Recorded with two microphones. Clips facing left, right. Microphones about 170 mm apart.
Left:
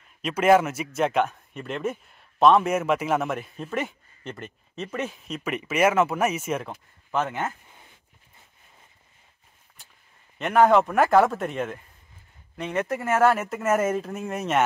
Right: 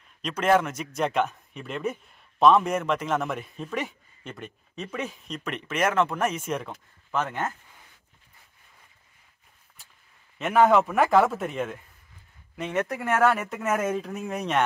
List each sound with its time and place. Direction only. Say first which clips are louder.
0.2 s speech: left 3 dB; 5° left (ahead or behind)
7.6 s a sound: left 2 dB; 20° left (ahead or behind)
10.4 s speech: left 1 dB; centre (ahead or behind)